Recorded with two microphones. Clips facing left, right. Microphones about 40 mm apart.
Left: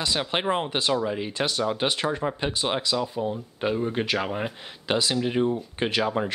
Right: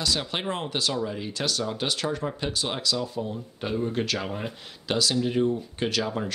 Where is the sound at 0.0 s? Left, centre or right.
Left.